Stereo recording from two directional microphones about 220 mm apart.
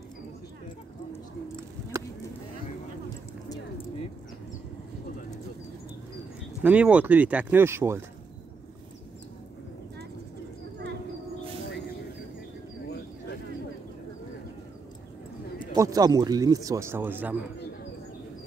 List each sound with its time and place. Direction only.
6.6 s speech: 5° right (ahead or behind)
15.7 s speech: 15° right (ahead or behind)